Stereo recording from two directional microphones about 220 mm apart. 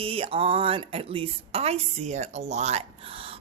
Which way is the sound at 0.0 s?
25° right (ahead or behind).